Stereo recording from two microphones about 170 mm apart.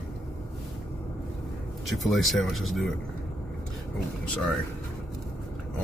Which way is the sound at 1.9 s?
Centre (ahead or behind).